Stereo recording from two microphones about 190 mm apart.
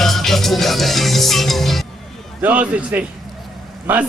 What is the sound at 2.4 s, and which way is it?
Speech, 10° right (ahead or behind).